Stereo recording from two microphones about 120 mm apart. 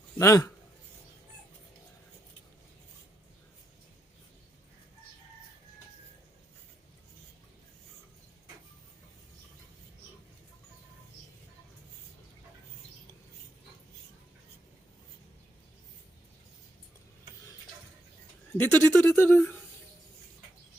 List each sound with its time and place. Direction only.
0.2 s speech: 25° left (ahead or behind)
18.5 s speech: 15° left (ahead or behind)